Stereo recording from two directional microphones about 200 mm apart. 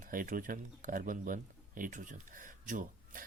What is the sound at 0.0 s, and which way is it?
Speech, 45° right (ahead or behind).